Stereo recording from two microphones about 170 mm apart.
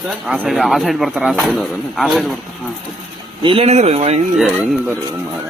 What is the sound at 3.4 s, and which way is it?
Speech, 30° right (ahead or behind).